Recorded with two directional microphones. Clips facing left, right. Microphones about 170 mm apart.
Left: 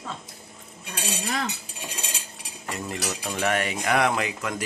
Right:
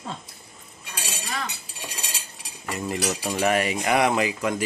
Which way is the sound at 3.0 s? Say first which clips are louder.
Right 4 dB; 15° right (ahead or behind).